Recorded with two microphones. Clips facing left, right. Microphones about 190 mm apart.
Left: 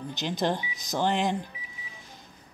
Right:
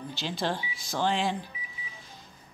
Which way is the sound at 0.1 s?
20° left (ahead or behind).